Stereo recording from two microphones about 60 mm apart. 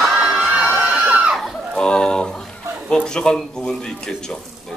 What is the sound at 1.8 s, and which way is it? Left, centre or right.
Speech, centre.